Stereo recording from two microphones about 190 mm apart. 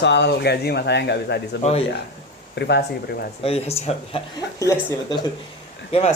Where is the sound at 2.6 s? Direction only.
60° left (ahead or behind).